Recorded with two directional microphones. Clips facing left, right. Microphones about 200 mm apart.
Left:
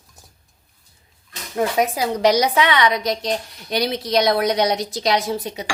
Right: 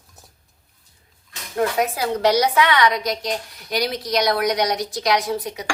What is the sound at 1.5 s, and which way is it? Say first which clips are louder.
A woman's voice: left 1 dB; 20° left (ahead or behind).